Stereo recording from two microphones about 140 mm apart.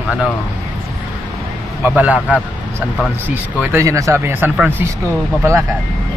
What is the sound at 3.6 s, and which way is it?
Speech, 20° right (ahead or behind).